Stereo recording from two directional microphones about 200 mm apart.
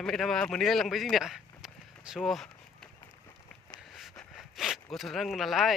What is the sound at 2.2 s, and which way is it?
Speech, centre (ahead or behind).